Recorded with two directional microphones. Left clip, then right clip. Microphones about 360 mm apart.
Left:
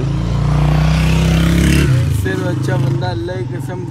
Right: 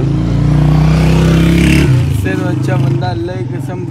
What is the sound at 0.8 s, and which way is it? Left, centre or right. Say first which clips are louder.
Vehicle: right 4 dB; centre.